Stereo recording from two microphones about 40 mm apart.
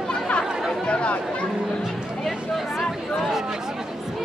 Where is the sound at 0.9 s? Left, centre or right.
Left.